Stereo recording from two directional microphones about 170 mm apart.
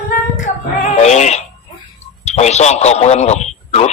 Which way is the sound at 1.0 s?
40° left (ahead or behind).